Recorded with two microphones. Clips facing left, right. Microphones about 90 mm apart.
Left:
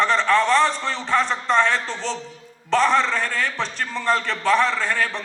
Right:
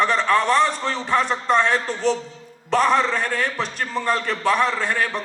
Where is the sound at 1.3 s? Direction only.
40° right (ahead or behind).